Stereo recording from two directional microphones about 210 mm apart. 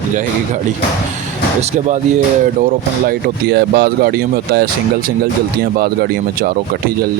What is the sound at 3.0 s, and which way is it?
Speech, 50° right (ahead or behind).